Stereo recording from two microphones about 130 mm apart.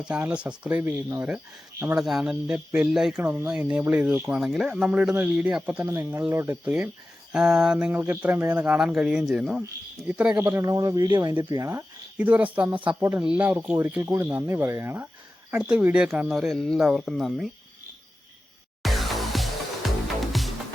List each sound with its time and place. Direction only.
0.0 s speech: 10° right (ahead or behind)
2.0 s speech: 5° right (ahead or behind)
5.8 s speech: 25° right (ahead or behind)
6.1 s speech: 10° right (ahead or behind); by 11.8 s 25° right (ahead or behind)
12.1 s speech: 10° right (ahead or behind)
18.8 s music: centre (ahead or behind)